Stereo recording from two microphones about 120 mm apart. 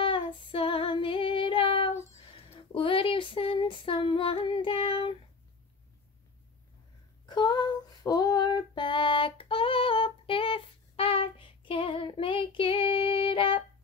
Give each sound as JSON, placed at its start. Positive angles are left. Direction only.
{"t": 0.0, "sound": "female singing", "side_deg": 45}
{"t": 2.0, "sound": "a sound", "side_deg": 55}
{"t": 7.2, "sound": "female singing", "side_deg": 40}